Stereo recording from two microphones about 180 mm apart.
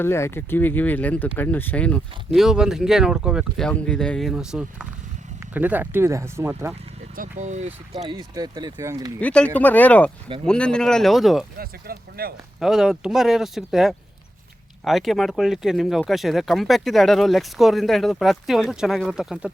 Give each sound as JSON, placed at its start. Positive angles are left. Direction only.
{"t": 0.0, "sound": "speech", "side_deg": 15}
{"t": 7.2, "sound": "speech", "side_deg": -40}
{"t": 8.0, "sound": "speech", "side_deg": -20}
{"t": 9.2, "sound": "speech", "side_deg": 5}
{"t": 11.5, "sound": "speech", "side_deg": -55}
{"t": 12.5, "sound": "speech", "side_deg": 0}